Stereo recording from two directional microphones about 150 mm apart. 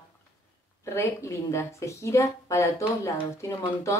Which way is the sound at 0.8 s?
20° left (ahead or behind).